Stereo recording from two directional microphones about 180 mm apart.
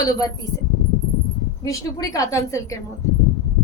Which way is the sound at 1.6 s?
20° left (ahead or behind).